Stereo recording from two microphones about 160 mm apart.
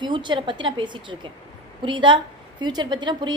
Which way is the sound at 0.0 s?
30° right (ahead or behind).